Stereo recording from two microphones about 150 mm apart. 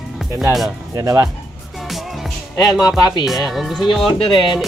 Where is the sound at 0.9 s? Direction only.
20° right (ahead or behind).